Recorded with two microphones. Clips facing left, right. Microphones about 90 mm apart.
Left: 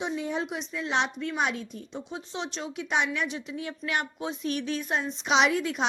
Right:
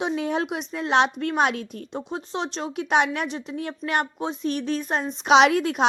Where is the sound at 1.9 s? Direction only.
45° right (ahead or behind).